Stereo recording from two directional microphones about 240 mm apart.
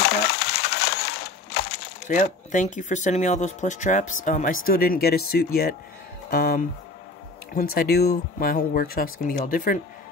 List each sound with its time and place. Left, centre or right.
0.0 s crushing: left
4.6 s speech: left
7.7 s speech: left